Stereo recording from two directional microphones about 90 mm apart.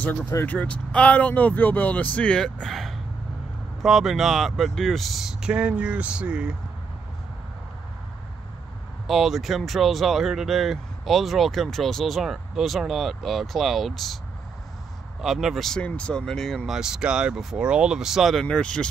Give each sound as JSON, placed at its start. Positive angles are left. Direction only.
{"t": 0.5, "sound": "speech", "side_deg": 15}
{"t": 9.0, "sound": "speech", "side_deg": 0}
{"t": 15.2, "sound": "speech", "side_deg": 0}
{"t": 15.8, "sound": "speech", "side_deg": 10}
{"t": 16.7, "sound": "speech", "side_deg": -5}
{"t": 18.4, "sound": "speech", "side_deg": 10}